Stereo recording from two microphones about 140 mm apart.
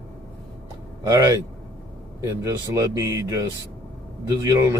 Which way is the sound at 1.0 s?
25° right (ahead or behind).